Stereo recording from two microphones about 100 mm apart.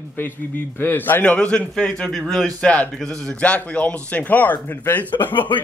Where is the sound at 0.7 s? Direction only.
20° left (ahead or behind).